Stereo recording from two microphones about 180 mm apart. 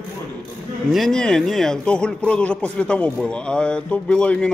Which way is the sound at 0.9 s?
Centre (ahead or behind).